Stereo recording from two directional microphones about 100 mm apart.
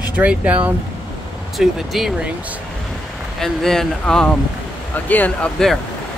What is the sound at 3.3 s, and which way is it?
Speech, 5° left (ahead or behind).